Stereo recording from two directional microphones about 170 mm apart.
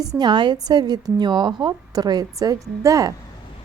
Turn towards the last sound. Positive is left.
turn(degrees=-20)  # may be behind; listen again after turning